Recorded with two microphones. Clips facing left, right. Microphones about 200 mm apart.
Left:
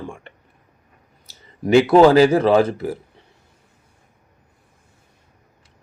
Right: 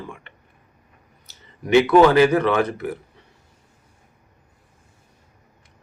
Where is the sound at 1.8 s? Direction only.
30° left (ahead or behind).